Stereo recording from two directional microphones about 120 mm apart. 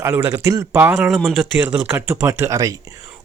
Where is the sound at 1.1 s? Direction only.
5° left (ahead or behind).